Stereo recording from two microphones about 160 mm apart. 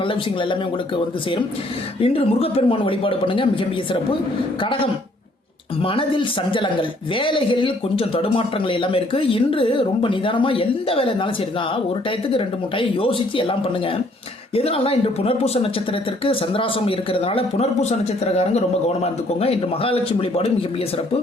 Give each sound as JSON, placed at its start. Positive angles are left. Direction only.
{"t": 2.0, "sound": "a man's voice", "side_deg": 35}
{"t": 4.6, "sound": "a man's voice", "side_deg": 35}
{"t": 12.3, "sound": "a man's voice", "side_deg": 35}